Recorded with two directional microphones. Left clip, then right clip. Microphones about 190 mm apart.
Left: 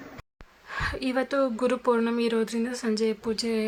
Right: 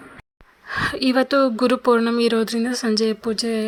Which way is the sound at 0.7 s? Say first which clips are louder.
Right 8 dB; 30° right (ahead or behind).